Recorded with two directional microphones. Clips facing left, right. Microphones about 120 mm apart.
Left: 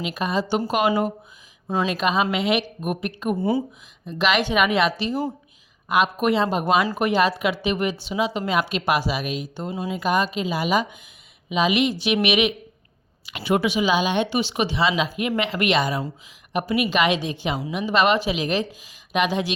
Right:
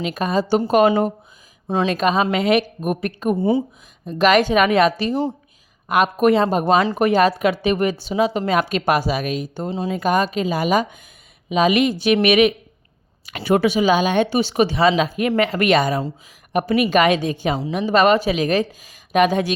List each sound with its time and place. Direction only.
0.1 s speech: 40° right (ahead or behind)
1.6 s speech: 20° right (ahead or behind)
1.9 s speech: 40° right (ahead or behind)
9.6 s speech: 25° right (ahead or behind)
9.9 s speech: 45° right (ahead or behind)
17.5 s a woman's voice: 35° right (ahead or behind)
17.8 s speech: 45° right (ahead or behind)